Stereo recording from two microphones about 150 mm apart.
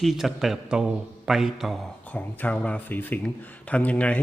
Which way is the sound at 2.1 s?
10° left (ahead or behind).